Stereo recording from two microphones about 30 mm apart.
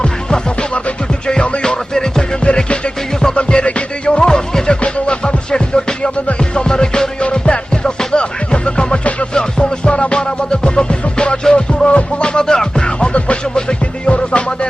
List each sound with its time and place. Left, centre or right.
0.0 s music: left
2.4 s music: left
7.3 s music: left